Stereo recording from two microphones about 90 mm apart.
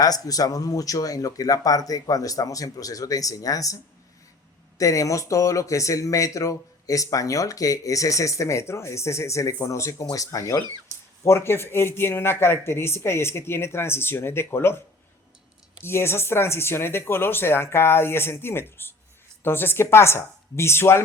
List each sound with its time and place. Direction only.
0.0 s speech: 45° left (ahead or behind)
4.8 s speech: 40° left (ahead or behind)
10.9 s a sound: 30° right (ahead or behind)
11.3 s speech: 30° left (ahead or behind)
15.8 s speech: 30° left (ahead or behind)